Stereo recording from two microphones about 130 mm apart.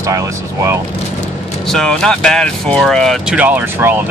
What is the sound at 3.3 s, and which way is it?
Speech, 15° right (ahead or behind).